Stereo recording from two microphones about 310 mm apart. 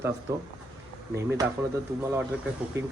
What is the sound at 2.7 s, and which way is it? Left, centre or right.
Speech, centre.